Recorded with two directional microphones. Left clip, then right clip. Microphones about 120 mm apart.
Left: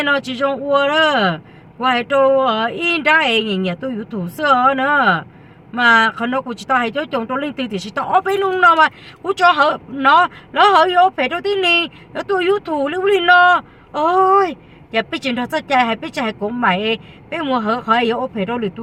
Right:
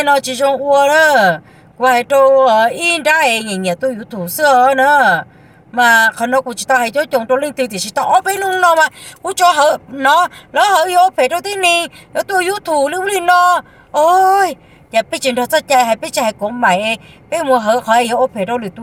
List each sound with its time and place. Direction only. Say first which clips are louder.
0.9 s a woman's voice: right 6 dB; 15° right (ahead or behind)